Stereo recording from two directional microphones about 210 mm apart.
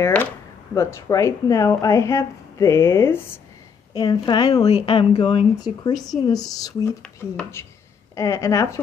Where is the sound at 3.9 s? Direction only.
20° left (ahead or behind).